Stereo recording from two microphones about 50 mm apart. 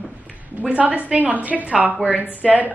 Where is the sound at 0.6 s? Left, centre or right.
Right.